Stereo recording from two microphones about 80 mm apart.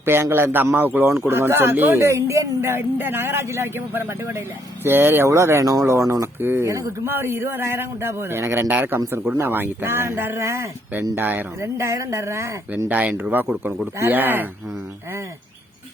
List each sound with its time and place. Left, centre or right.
0.0 s a man's voice: right
7.1 s a man's voice: right
11.6 s speech: right
12.9 s a man's voice: centre